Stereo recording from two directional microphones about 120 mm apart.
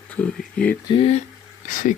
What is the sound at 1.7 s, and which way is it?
Speech, 90° left.